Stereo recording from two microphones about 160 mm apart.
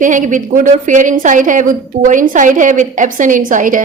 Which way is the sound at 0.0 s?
55° right (ahead or behind).